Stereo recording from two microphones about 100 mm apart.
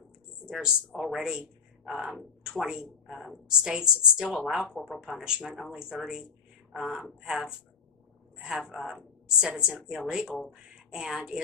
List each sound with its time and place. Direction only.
0.5 s a woman's voice: 5° right (ahead or behind)